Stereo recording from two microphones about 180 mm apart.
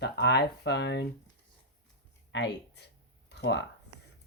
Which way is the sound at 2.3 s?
70° left (ahead or behind).